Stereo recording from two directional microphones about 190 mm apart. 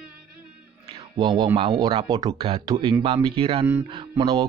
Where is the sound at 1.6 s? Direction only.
25° right (ahead or behind).